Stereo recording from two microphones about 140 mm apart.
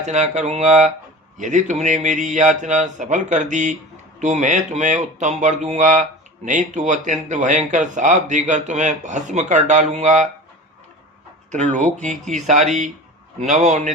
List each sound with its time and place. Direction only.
0.0 s speech: 55° right (ahead or behind)
11.5 s speech: 60° right (ahead or behind)